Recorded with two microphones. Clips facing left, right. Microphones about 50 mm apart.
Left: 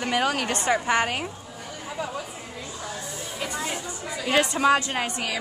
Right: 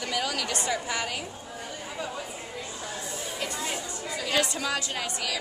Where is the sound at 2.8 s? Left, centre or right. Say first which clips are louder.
Left 3 dB; left.